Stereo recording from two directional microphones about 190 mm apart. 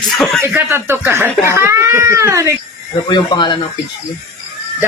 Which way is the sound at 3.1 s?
25° left (ahead or behind).